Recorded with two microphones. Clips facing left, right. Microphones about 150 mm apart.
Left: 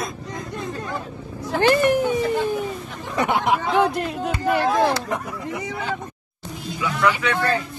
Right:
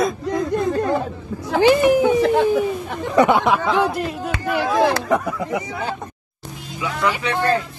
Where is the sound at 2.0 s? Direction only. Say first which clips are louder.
Right 5 dB; 75° right (ahead or behind).